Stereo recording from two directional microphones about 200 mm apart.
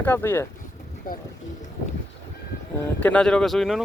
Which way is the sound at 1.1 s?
45° left (ahead or behind).